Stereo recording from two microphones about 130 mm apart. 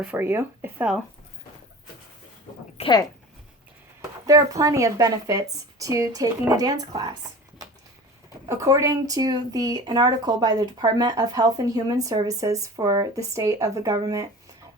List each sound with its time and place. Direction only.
0.0 s speech: 15° right (ahead or behind)
2.8 s speech: 50° left (ahead or behind)
4.3 s speech: 25° right (ahead or behind)
8.4 s speech: 25° right (ahead or behind)